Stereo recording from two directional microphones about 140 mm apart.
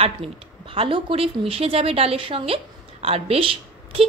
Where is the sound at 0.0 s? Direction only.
45° right (ahead or behind).